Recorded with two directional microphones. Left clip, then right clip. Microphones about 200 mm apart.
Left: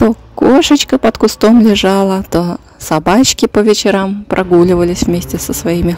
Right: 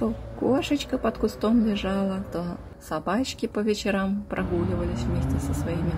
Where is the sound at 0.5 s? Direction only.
50° left (ahead or behind).